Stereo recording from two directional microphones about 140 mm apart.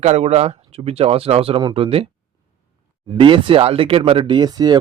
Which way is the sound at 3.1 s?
35° right (ahead or behind).